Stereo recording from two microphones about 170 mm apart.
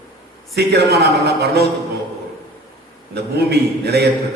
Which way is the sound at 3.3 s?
75° right (ahead or behind).